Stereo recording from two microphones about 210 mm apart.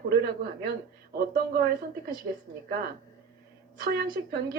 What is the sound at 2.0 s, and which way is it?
Speech, 45° right (ahead or behind).